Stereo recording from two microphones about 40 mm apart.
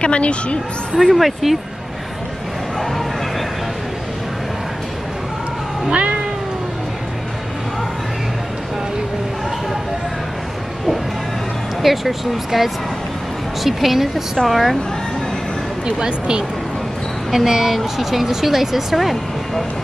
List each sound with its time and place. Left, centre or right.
0.0 s speech: left
0.9 s a woman's voice: centre
2.8 s bow-wow: centre
5.9 s cat: right
11.8 s a woman's voice: centre
16.0 s speech: right
17.3 s a woman's voice: centre